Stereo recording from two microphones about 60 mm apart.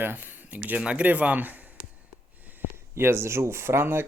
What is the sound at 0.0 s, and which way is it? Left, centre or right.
Speech, right.